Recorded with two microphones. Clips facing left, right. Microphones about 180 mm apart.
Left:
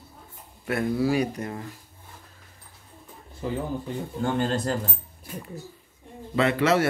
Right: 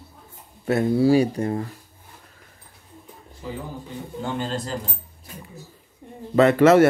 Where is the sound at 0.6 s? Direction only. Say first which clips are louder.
Right 6 dB; 25° right (ahead or behind).